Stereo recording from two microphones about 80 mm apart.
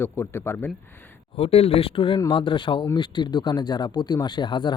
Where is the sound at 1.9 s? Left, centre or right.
Left.